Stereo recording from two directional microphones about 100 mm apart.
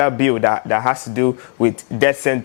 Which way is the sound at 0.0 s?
15° left (ahead or behind).